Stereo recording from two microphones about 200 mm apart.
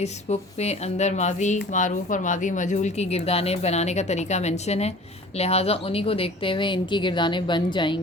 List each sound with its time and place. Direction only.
0.0 s speech: 35° left (ahead or behind)